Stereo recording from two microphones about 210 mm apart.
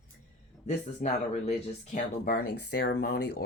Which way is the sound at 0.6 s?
35° left (ahead or behind).